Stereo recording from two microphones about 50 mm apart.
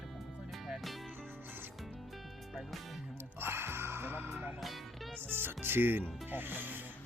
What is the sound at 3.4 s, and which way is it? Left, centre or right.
Music, right.